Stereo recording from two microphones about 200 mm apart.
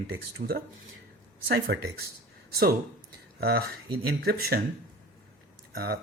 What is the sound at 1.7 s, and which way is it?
Speech, 55° right (ahead or behind).